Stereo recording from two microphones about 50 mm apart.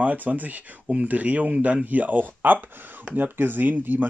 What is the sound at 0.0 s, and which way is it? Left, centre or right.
Speech, right.